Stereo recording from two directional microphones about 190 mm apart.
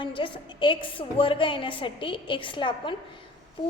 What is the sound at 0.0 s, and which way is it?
A woman's voice, 25° left (ahead or behind).